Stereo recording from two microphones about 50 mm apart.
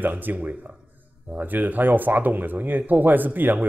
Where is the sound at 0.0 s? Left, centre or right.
Right.